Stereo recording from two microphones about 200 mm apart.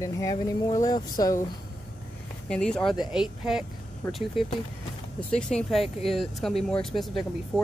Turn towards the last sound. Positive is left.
turn(degrees=0)  # may be behind; listen again after turning